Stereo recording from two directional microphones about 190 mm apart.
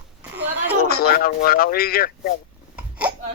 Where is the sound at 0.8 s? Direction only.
55° left (ahead or behind).